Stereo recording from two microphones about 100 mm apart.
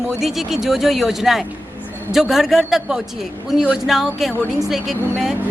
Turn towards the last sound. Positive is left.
turn(degrees=-5)  # may be behind; listen again after turning